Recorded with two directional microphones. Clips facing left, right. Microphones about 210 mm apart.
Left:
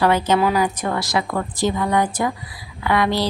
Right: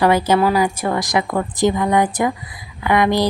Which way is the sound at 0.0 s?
10° right (ahead or behind).